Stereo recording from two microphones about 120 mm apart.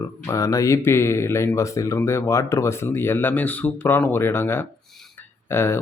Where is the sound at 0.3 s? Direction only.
25° left (ahead or behind).